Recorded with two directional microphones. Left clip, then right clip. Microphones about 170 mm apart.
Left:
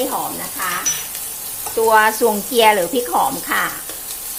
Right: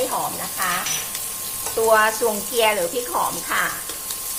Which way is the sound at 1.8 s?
40° left (ahead or behind).